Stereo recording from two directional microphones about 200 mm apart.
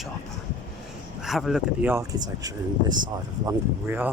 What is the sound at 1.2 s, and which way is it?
Speech, centre (ahead or behind).